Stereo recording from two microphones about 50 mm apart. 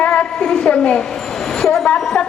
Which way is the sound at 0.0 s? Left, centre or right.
Left.